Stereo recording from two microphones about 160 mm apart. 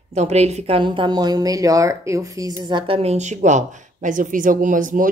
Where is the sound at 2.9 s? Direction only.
40° right (ahead or behind).